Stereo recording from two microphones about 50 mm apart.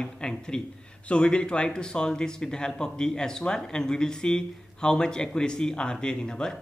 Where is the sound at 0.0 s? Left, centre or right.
Centre.